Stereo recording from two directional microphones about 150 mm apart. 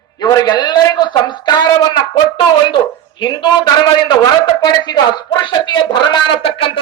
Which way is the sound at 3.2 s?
30° left (ahead or behind).